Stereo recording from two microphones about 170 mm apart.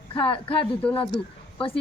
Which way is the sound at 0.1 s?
30° left (ahead or behind).